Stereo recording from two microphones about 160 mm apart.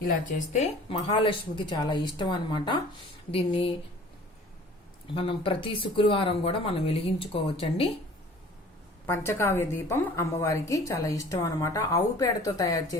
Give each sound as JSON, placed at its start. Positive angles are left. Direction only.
{"t": 0.3, "sound": "a woman's voice", "side_deg": 45}
{"t": 5.1, "sound": "speech", "side_deg": 35}
{"t": 9.0, "sound": "a woman's voice", "side_deg": 15}